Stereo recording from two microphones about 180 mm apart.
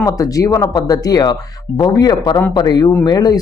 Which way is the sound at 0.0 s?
20° left (ahead or behind).